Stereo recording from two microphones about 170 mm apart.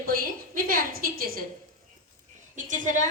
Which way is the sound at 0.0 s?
60° right (ahead or behind).